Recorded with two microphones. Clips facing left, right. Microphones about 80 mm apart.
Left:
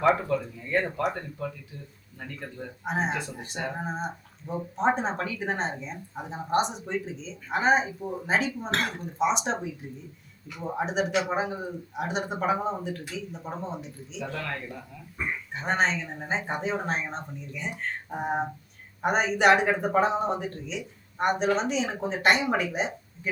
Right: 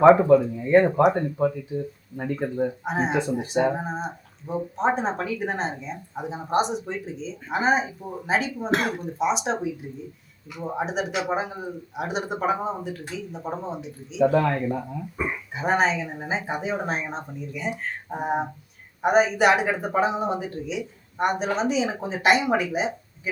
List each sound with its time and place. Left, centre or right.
0.0 s speech: right
2.1 s speech: right
2.8 s speech: centre
15.2 s speech: centre